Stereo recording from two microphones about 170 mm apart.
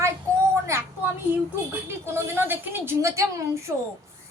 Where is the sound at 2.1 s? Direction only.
15° right (ahead or behind).